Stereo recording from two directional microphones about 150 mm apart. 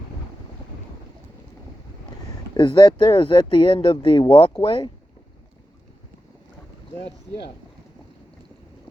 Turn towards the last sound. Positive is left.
turn(degrees=40)  # may be behind; listen again after turning